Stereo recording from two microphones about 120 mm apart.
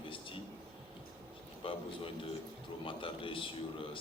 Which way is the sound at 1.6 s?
50° left (ahead or behind).